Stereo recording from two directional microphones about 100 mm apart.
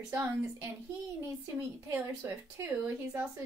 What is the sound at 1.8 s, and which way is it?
A woman's voice, 25° right (ahead or behind).